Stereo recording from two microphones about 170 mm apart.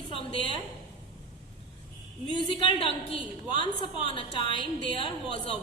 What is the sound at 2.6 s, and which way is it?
A woman's voice, 30° left (ahead or behind).